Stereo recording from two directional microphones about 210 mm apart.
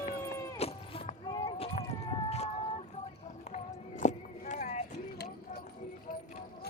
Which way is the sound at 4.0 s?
35° left (ahead or behind).